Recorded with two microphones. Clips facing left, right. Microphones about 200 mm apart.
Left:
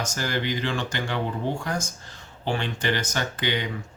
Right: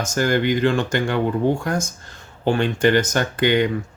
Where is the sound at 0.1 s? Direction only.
50° right (ahead or behind).